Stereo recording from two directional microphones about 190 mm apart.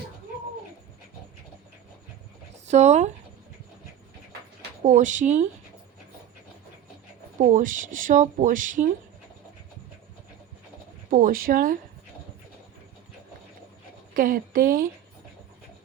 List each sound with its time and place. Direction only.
2.6 s speech: 35° right (ahead or behind)
4.8 s speech: 40° right (ahead or behind)
7.3 s speech: 45° right (ahead or behind)
11.1 s speech: 50° right (ahead or behind)
14.1 s speech: 45° right (ahead or behind)